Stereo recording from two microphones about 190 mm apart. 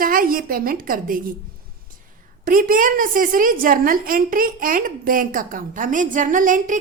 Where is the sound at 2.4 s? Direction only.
45° right (ahead or behind).